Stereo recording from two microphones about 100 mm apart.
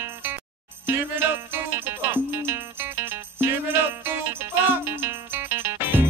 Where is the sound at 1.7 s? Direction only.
20° right (ahead or behind).